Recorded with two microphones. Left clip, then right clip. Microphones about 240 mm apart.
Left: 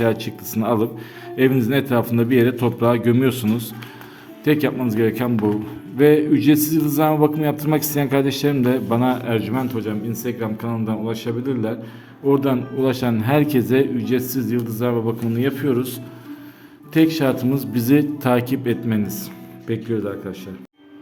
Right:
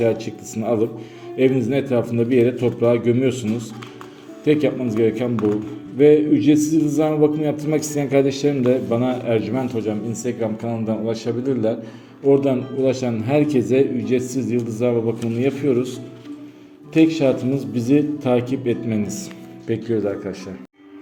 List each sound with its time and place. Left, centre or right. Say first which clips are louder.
0.0 s a man's voice: right 1 dB; left